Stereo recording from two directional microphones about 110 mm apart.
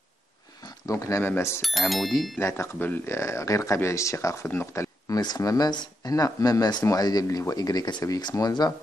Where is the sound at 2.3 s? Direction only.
25° left (ahead or behind).